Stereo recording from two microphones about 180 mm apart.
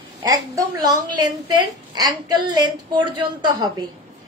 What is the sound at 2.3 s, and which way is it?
A woman's voice, 25° right (ahead or behind).